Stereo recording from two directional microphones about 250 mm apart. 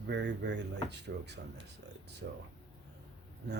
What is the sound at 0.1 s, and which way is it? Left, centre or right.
Speech, right.